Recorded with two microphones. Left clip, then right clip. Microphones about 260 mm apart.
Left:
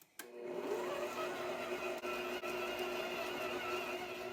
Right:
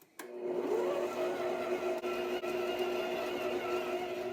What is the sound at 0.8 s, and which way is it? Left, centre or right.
Vehicle, centre.